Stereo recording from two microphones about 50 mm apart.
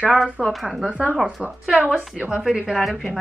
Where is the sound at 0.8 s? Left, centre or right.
Right.